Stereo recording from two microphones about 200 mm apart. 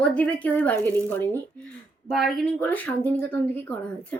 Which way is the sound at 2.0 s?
Centre (ahead or behind).